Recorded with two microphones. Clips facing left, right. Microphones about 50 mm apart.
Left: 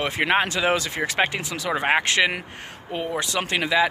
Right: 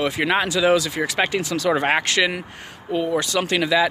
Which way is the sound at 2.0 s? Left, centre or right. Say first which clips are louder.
Right 1 dB; left.